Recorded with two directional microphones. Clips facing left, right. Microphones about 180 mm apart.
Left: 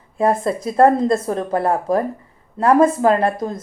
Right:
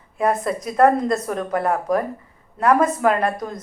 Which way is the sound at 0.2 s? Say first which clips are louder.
Left 3 dB; 30° left (ahead or behind).